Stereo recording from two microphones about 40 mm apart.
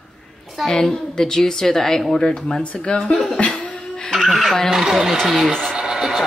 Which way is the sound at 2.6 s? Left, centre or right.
Left.